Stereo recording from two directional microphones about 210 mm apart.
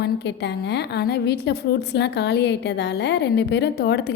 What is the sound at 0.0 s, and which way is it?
A woman's voice, 55° left (ahead or behind).